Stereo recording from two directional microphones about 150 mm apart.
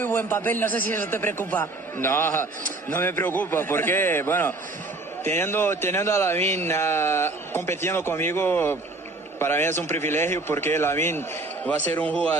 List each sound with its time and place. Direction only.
0.0 s a man's voice: 10° left (ahead or behind)